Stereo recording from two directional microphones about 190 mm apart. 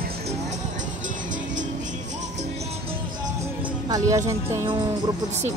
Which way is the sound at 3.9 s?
15° right (ahead or behind).